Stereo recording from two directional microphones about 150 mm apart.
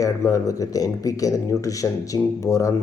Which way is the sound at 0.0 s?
20° left (ahead or behind).